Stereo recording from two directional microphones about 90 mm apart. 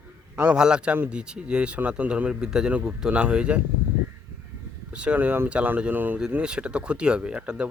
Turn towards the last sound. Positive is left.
turn(degrees=-10)  # may be behind; listen again after turning